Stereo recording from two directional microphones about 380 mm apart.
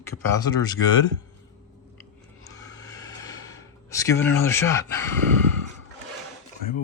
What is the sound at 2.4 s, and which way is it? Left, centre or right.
Gasp, centre.